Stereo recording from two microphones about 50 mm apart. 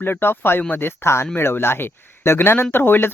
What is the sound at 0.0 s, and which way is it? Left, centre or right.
Speech, left.